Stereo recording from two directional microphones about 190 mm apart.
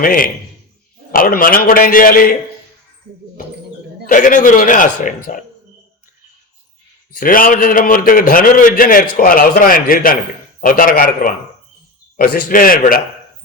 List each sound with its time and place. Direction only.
0.0 s a man's voice: 50° left (ahead or behind)
4.0 s a man's voice: 45° left (ahead or behind)
7.2 s a man's voice: 45° left (ahead or behind)